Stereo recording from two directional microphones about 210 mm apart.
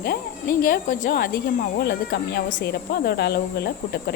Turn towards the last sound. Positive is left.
turn(degrees=50)  # may be behind; listen again after turning